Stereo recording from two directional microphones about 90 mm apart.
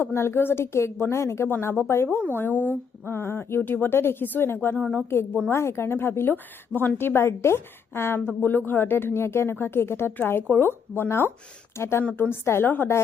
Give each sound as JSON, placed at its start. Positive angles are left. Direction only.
{"t": 0.0, "sound": "a woman's voice", "side_deg": 30}
{"t": 4.8, "sound": "speech", "side_deg": 10}
{"t": 5.5, "sound": "a woman's voice", "side_deg": 30}